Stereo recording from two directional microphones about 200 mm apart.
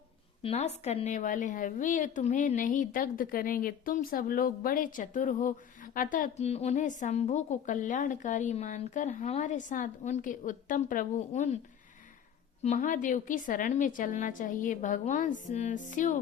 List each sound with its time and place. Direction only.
0.4 s a woman's voice: 35° left (ahead or behind)
12.6 s a woman's voice: 40° left (ahead or behind)